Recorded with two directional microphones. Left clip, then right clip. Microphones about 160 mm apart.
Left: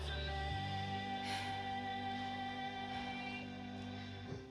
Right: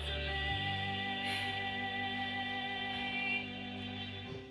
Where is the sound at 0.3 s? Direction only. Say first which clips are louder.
Right 7 dB; 30° right (ahead or behind).